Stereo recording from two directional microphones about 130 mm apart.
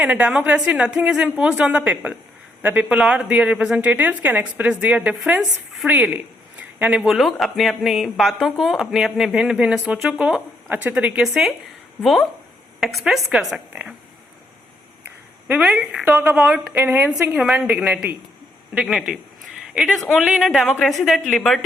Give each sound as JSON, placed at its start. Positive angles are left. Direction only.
{"t": 0.0, "sound": "a woman's voice", "side_deg": -10}
{"t": 15.0, "sound": "a woman's voice", "side_deg": -15}
{"t": 19.6, "sound": "a sound", "side_deg": -5}
{"t": 20.1, "sound": "a woman's voice", "side_deg": -5}